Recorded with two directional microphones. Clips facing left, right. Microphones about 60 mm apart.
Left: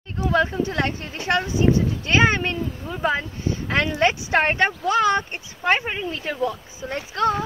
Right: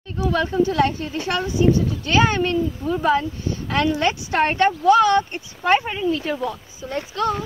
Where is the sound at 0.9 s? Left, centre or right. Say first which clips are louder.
Left 1 dB; left.